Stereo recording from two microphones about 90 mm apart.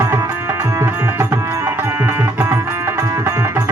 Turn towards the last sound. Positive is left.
turn(degrees=-40)  # may be behind; listen again after turning